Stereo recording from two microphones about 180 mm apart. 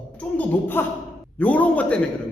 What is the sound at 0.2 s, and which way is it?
A man's voice, 10° left (ahead or behind).